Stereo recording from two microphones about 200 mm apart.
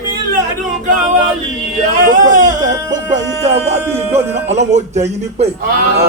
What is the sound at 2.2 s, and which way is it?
Speech, 40° right (ahead or behind).